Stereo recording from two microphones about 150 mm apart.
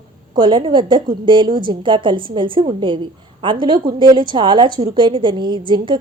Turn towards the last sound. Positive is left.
turn(degrees=-30)  # may be behind; listen again after turning